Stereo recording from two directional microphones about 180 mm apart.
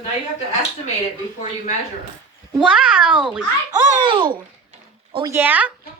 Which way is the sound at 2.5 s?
5° right (ahead or behind).